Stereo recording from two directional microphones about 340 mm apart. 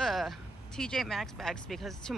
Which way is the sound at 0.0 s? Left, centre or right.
Centre.